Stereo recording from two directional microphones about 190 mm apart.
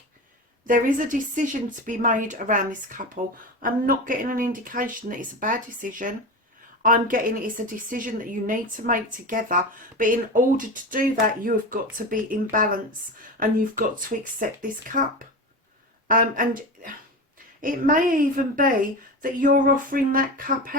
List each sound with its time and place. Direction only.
0.6 s a woman's voice: 45° right (ahead or behind)
16.0 s a woman's voice: 45° right (ahead or behind)